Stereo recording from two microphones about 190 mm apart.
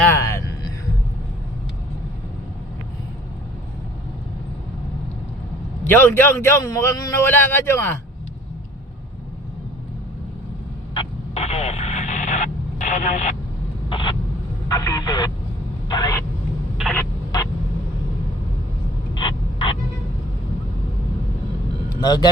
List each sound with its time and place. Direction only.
0.0 s music: 15° left (ahead or behind)
5.8 s a man's voice: 10° left (ahead or behind)
10.9 s radio: 35° left (ahead or behind)
13.9 s vehicle: 25° left (ahead or behind)
14.7 s speech: 20° left (ahead or behind)
19.1 s a sound: 25° left (ahead or behind)
22.0 s speech: 20° left (ahead or behind)